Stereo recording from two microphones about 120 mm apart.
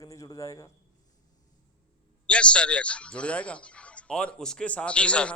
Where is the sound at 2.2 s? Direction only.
10° left (ahead or behind).